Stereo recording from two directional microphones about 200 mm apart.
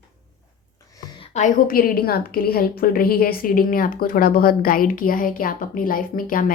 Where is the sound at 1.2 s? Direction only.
35° left (ahead or behind).